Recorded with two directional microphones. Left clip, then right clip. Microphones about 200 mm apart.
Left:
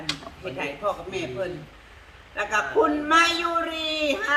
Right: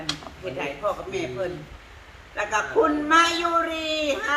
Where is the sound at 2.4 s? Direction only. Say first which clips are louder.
Even; 15° left (ahead or behind).